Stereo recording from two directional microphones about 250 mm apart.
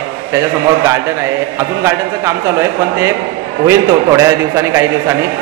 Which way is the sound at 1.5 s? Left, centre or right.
Centre.